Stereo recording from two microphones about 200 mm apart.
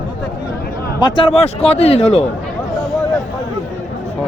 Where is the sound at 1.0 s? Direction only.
25° left (ahead or behind).